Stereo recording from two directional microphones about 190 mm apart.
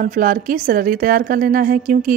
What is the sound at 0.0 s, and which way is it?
A woman's voice, 45° right (ahead or behind).